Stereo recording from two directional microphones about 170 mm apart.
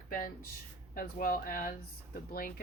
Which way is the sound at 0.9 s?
55° left (ahead or behind).